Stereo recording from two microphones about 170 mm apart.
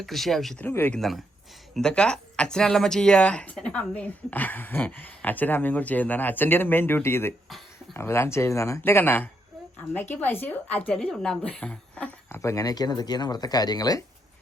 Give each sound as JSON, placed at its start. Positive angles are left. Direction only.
{"t": 0.0, "sound": "speech", "side_deg": 0}
{"t": 0.7, "sound": "speech", "side_deg": 10}
{"t": 0.9, "sound": "speech", "side_deg": 0}